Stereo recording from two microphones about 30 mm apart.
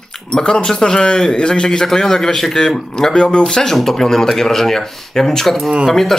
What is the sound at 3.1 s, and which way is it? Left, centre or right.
Speech, left.